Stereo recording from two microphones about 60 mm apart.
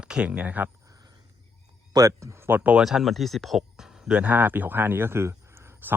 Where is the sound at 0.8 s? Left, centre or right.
Right.